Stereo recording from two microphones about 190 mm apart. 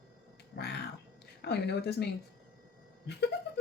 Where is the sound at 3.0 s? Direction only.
60° left (ahead or behind).